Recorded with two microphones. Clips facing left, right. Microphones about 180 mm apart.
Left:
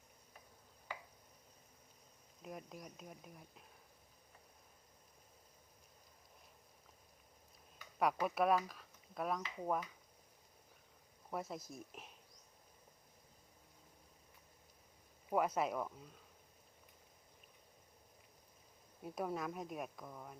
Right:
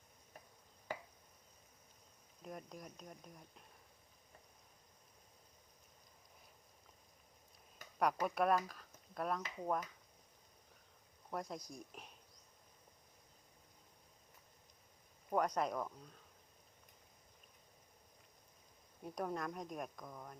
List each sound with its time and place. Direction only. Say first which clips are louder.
0.9 s a sound: right 4 dB; 45° right (ahead or behind)
2.4 s speech: even; 5° left (ahead or behind)
7.9 s speech: even; centre (ahead or behind)
11.3 s speech: even; 5° left (ahead or behind)
15.3 s speech: even; 5° left (ahead or behind)
19.0 s speech: left 1 dB; 5° left (ahead or behind)